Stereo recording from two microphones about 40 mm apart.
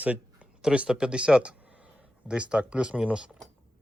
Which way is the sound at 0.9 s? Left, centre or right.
Right.